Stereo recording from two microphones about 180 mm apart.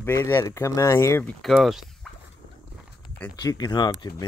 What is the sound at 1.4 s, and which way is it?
Speech, centre (ahead or behind).